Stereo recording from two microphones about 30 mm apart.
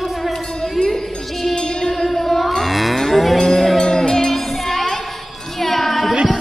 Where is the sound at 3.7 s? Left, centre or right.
Centre.